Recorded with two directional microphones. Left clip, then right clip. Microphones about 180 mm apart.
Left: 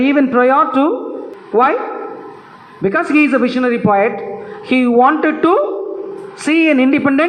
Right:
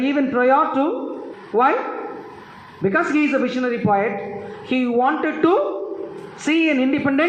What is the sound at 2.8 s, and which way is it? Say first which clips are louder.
A man's voice: left 5 dB; 30° left (ahead or behind).